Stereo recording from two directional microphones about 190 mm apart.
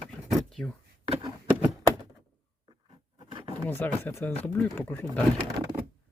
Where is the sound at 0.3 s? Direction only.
Centre (ahead or behind).